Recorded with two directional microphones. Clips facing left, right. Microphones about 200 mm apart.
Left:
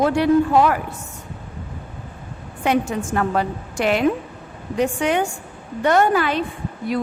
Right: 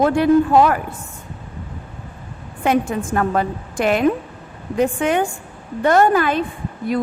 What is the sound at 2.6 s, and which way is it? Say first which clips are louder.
A woman's voice: right 2 dB; 50° right (ahead or behind).